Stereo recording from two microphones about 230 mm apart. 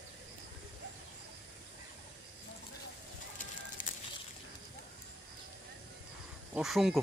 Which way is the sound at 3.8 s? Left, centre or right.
Left.